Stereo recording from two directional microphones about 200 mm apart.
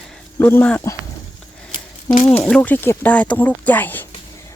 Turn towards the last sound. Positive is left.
turn(degrees=10)  # may be behind; listen again after turning